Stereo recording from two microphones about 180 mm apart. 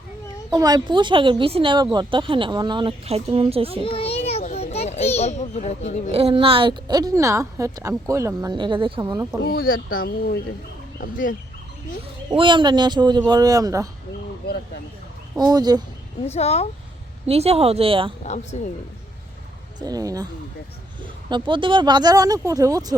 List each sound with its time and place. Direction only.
0.5 s speech: 20° right (ahead or behind)
3.8 s children playing: 30° left (ahead or behind)
6.1 s speech: 35° right (ahead or behind)
9.4 s speech: 55° left (ahead or behind)
12.3 s speech: 25° right (ahead or behind)
15.4 s speech: 20° right (ahead or behind)
16.2 s speech: 35° left (ahead or behind)
17.2 s speech: 35° right (ahead or behind)
18.2 s speech: 40° left (ahead or behind)
19.8 s speech: 20° right (ahead or behind)